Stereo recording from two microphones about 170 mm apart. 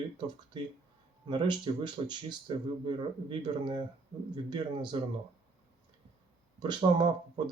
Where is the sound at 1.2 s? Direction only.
25° right (ahead or behind).